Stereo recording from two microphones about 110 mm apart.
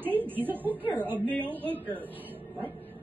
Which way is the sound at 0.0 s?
15° right (ahead or behind).